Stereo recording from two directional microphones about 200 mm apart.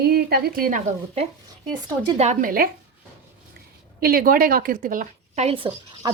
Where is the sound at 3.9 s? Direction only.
45° right (ahead or behind); by 6.1 s 25° right (ahead or behind).